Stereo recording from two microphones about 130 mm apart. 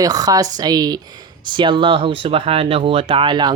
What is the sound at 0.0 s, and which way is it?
Speech, 30° right (ahead or behind).